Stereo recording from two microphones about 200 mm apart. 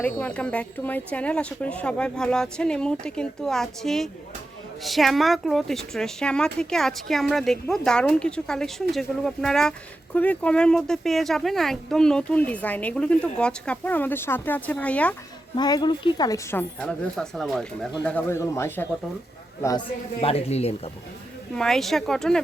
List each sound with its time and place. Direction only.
0.0 s a woman's voice: 5° left (ahead or behind)
15.5 s speech: 20° left (ahead or behind)
20.2 s speech: 30° left (ahead or behind)
21.5 s a woman's voice: 5° left (ahead or behind)